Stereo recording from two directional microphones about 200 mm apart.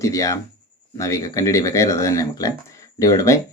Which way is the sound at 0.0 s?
15° left (ahead or behind).